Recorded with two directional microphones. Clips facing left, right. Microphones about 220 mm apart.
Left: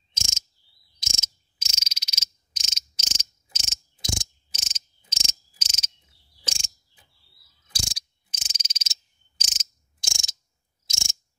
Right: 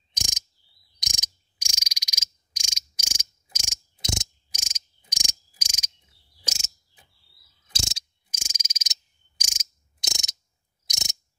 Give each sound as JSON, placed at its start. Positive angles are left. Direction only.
{"t": 0.1, "sound": "bird", "side_deg": -15}
{"t": 0.9, "sound": "frog", "side_deg": -15}
{"t": 4.0, "sound": "cricket", "side_deg": -20}
{"t": 4.6, "sound": "cricket", "side_deg": -10}
{"t": 6.4, "sound": "pulleys", "side_deg": -5}
{"t": 7.7, "sound": "mechanisms", "side_deg": -25}
{"t": 8.3, "sound": "frog", "side_deg": -10}
{"t": 9.4, "sound": "a sound", "side_deg": -10}